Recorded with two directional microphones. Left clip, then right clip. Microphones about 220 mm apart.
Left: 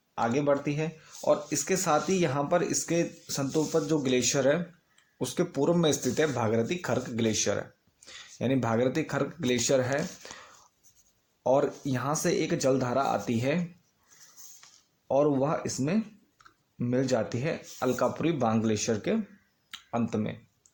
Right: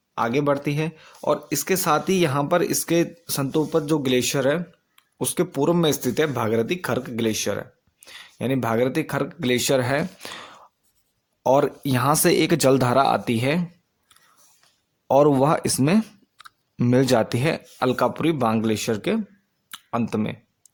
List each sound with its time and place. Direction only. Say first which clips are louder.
0.1 s speech: right 5 dB; 45° right (ahead or behind)
15.0 s speech: right 8 dB; 45° right (ahead or behind)